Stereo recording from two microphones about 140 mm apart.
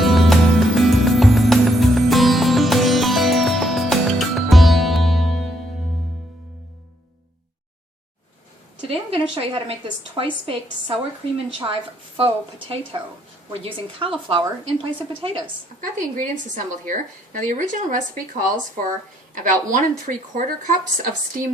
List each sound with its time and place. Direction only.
0.0 s music: centre (ahead or behind)
8.9 s a woman's voice: 40° right (ahead or behind)
15.8 s a woman's voice: 70° right (ahead or behind)